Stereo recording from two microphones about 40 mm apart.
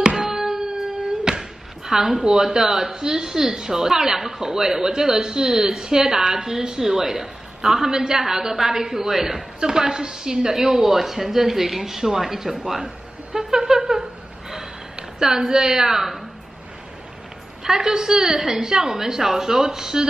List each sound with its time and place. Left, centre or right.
0.0 s a sound: right
1.9 s a woman's voice: centre
17.6 s a woman's voice: centre